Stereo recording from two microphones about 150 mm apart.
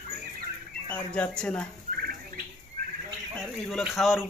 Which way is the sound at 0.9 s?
5° left (ahead or behind).